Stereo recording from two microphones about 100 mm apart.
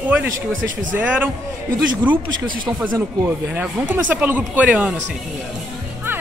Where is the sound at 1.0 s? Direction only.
15° right (ahead or behind).